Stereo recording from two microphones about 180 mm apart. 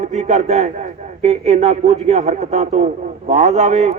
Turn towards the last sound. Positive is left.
turn(degrees=-40)  # may be behind; listen again after turning